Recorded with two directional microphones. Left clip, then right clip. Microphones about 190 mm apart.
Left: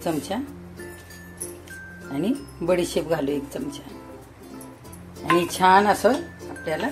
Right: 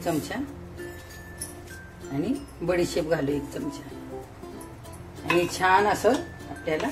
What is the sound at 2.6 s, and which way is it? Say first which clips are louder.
Speech: left 3 dB; 45° left (ahead or behind).